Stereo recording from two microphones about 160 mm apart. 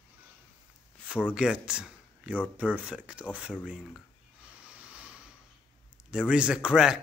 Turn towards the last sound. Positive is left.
turn(degrees=-5)  # may be behind; listen again after turning